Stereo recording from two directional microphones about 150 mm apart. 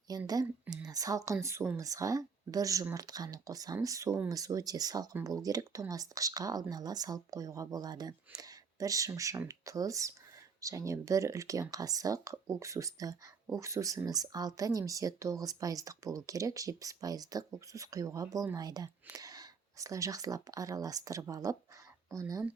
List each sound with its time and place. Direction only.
0.1 s speech: 25° right (ahead or behind)